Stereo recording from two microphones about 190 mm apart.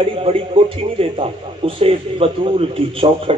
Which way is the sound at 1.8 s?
30° right (ahead or behind).